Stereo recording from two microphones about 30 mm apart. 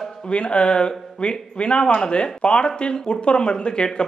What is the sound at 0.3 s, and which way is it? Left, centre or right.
Speech, left.